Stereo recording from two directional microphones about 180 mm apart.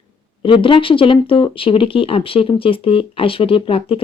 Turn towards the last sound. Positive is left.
turn(degrees=30)  # may be behind; listen again after turning